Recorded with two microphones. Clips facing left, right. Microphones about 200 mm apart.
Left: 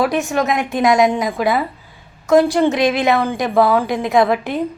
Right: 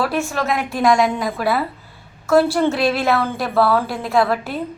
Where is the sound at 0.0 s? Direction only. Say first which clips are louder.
Left 4 dB; 15° left (ahead or behind).